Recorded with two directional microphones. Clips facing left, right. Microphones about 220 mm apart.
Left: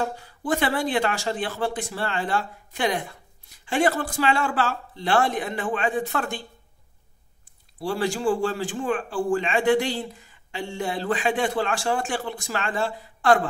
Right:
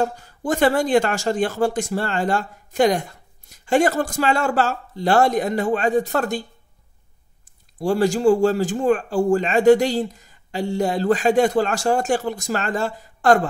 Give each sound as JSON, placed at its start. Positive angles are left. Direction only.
{"t": 0.0, "sound": "speech", "side_deg": -45}
{"t": 7.8, "sound": "speech", "side_deg": -45}